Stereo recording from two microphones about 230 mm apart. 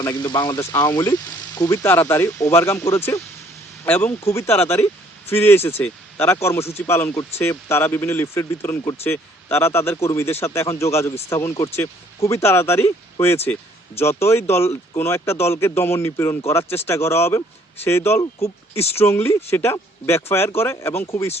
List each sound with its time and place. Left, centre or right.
0.0 s speech: centre